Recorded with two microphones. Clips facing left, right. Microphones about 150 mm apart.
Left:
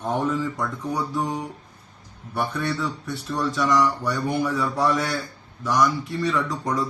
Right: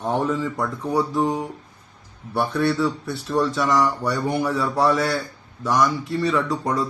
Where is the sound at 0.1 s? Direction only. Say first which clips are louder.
Right 1 dB; 25° right (ahead or behind).